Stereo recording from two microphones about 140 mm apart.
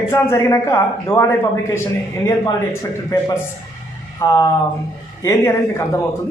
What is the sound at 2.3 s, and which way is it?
Speech, 25° left (ahead or behind).